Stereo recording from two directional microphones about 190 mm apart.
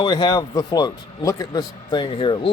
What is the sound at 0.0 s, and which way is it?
A man's voice, 25° left (ahead or behind).